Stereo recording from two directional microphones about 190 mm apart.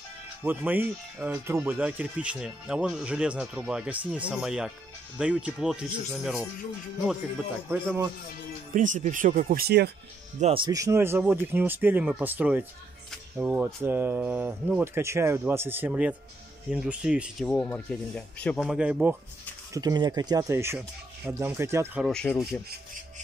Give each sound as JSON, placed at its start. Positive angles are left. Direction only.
{"t": 0.4, "sound": "speech", "side_deg": -10}
{"t": 7.7, "sound": "speech", "side_deg": -10}
{"t": 8.7, "sound": "speech", "side_deg": -40}
{"t": 10.4, "sound": "speech", "side_deg": -25}
{"t": 19.7, "sound": "speech", "side_deg": -20}
{"t": 22.0, "sound": "speech", "side_deg": 5}